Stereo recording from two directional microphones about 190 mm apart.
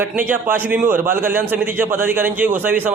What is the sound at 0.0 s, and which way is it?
A man's voice, 10° right (ahead or behind).